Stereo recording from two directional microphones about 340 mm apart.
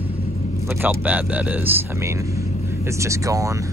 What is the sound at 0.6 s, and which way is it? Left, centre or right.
Speech, centre.